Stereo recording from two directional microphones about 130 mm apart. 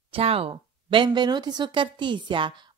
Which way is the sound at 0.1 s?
45° right (ahead or behind).